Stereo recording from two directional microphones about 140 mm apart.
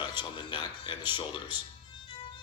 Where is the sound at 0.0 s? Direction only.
35° left (ahead or behind).